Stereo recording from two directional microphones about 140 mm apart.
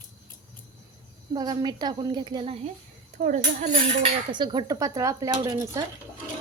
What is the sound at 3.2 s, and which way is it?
Speech, 65° right (ahead or behind).